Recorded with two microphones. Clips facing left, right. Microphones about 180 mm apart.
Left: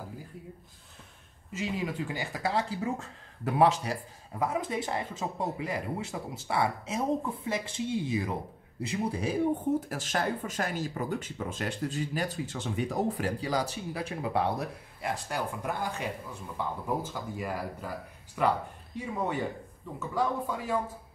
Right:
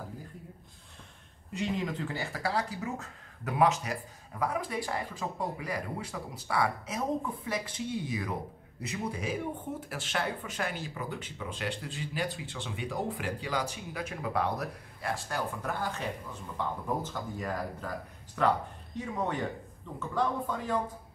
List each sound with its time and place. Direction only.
1.5 s speech: 5° left (ahead or behind)